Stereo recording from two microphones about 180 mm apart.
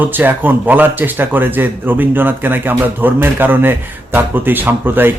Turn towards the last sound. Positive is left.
turn(degrees=-10)  # may be behind; listen again after turning